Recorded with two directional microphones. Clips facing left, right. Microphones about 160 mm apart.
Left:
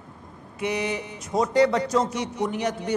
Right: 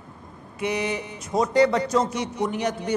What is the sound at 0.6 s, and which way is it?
A man's voice, 10° right (ahead or behind).